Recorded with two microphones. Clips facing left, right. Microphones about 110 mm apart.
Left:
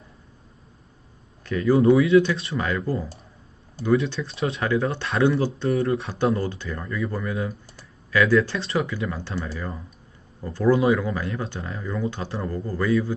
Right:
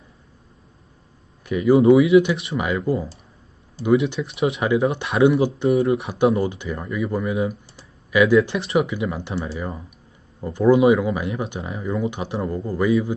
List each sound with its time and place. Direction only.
1.5 s speech: 15° right (ahead or behind)
1.7 s speech: 25° right (ahead or behind)
3.8 s speech: 50° left (ahead or behind)
4.1 s speech: 20° right (ahead or behind)